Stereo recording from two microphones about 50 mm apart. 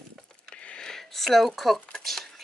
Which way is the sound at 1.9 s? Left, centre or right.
Centre.